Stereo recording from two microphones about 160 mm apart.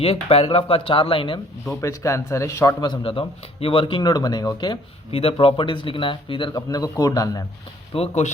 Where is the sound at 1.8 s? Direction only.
20° left (ahead or behind).